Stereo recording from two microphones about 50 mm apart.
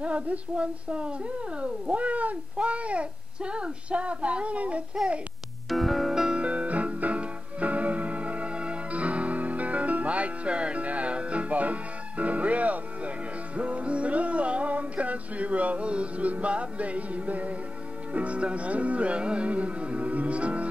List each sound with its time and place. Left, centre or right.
0.0 s speech: right
5.7 s music: centre
6.4 s music: right
18.1 s speech: right